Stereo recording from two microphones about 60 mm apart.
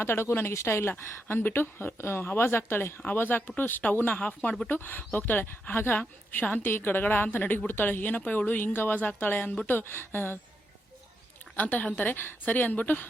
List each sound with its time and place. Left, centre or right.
0.0 s speech: left
11.5 s a woman's voice: left